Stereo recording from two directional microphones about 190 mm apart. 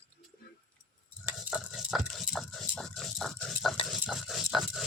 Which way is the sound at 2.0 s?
Centre (ahead or behind).